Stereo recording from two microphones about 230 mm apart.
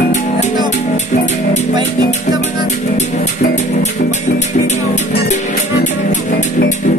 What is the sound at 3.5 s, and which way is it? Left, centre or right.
Music, left.